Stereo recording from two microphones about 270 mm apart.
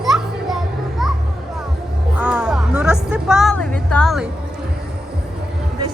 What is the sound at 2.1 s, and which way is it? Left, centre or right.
Music, centre.